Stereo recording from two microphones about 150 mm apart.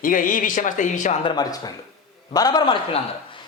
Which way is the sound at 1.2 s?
30° left (ahead or behind).